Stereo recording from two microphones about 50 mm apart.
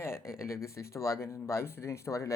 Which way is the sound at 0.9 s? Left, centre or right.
Left.